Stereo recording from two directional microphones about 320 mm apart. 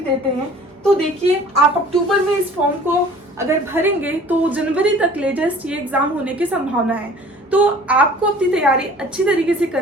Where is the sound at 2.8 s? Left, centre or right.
Centre.